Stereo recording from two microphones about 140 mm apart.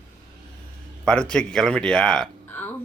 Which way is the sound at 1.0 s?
5° left (ahead or behind).